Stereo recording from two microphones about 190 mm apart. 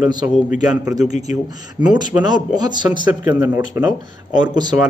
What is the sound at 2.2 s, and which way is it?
Speech, 20° right (ahead or behind).